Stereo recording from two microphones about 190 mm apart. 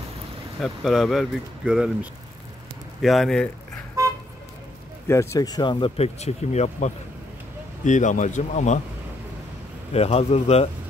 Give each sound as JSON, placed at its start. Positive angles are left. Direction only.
{"t": 0.6, "sound": "speech", "side_deg": 0}
{"t": 4.0, "sound": "vehicle", "side_deg": -15}
{"t": 5.0, "sound": "a man's voice", "side_deg": 15}
{"t": 9.9, "sound": "a man's voice", "side_deg": 35}